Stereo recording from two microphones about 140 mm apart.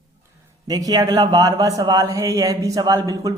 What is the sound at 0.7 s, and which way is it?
A man's voice, 25° right (ahead or behind).